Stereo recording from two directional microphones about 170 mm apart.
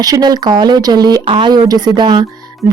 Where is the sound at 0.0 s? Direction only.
20° right (ahead or behind).